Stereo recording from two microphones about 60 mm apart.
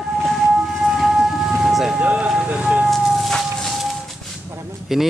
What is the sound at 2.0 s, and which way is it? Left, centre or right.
Vehicle, right.